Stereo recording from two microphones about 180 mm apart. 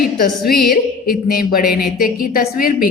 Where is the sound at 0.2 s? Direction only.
60° left (ahead or behind).